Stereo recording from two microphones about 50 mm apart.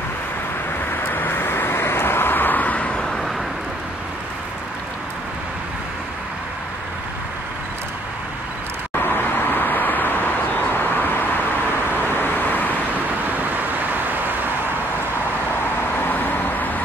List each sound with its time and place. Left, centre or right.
1.0 s vehicle: left
9.0 s vehicle: left
13.9 s vehicle: right
16.0 s vehicle: left